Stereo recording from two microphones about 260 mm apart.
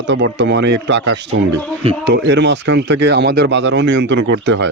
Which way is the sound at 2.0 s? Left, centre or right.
Right.